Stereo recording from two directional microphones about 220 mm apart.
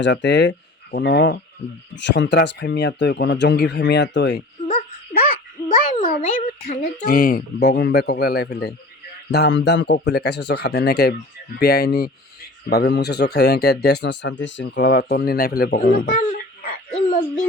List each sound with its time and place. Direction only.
0.0 s speech: 55° left (ahead or behind)
5.6 s speech: 35° left (ahead or behind)